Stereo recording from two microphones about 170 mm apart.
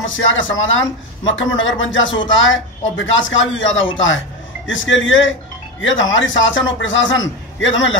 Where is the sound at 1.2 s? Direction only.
90° left.